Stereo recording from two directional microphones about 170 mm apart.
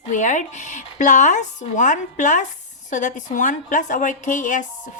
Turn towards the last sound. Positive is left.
turn(degrees=50)  # may be behind; listen again after turning